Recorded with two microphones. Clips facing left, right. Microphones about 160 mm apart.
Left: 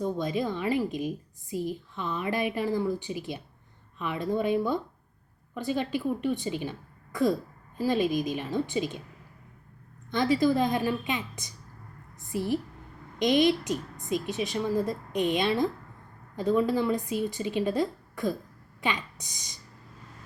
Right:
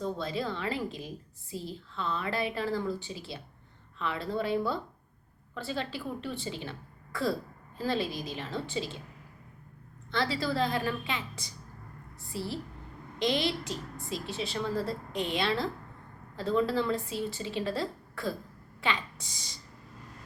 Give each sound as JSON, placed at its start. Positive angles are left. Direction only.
{"t": 0.0, "sound": "a woman's voice", "side_deg": 15}
{"t": 10.1, "sound": "a woman's voice", "side_deg": 15}